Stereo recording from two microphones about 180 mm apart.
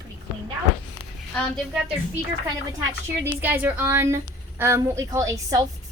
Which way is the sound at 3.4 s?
10° right (ahead or behind).